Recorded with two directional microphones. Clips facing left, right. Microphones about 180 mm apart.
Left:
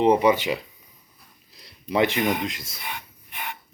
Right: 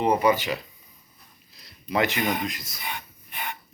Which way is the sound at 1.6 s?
30° left (ahead or behind).